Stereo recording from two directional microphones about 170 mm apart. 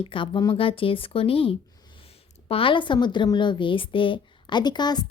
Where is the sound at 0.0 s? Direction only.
30° left (ahead or behind).